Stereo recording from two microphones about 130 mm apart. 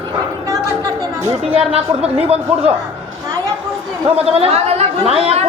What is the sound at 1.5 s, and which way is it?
Speech, 50° right (ahead or behind).